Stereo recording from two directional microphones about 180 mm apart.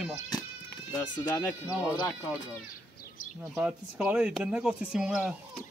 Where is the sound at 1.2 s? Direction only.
10° left (ahead or behind).